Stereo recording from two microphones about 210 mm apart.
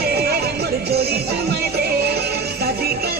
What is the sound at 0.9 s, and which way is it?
Speech, 50° right (ahead or behind).